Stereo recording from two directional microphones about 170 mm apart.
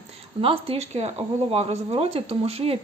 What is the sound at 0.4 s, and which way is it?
Speech, 35° right (ahead or behind).